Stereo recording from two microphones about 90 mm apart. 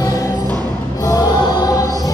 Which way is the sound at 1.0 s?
45° left (ahead or behind).